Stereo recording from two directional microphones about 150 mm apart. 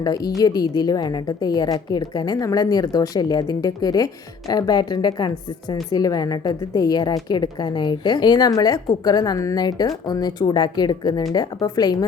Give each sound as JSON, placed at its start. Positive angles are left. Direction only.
{"t": 0.0, "sound": "a woman's voice", "side_deg": 25}